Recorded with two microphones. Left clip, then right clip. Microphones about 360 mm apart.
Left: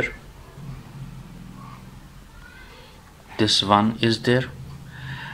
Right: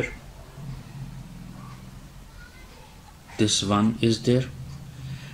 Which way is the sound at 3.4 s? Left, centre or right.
Centre.